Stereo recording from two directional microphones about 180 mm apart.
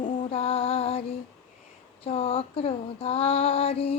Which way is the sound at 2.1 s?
30° left (ahead or behind).